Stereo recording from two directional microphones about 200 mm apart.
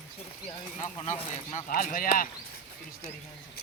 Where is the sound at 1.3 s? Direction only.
35° left (ahead or behind).